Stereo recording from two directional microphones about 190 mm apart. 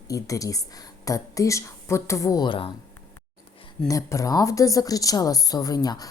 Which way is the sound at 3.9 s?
15° left (ahead or behind).